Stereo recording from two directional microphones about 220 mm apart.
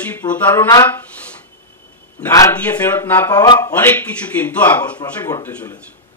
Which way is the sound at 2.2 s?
10° left (ahead or behind).